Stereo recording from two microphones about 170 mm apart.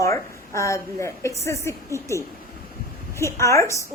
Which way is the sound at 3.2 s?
15° left (ahead or behind).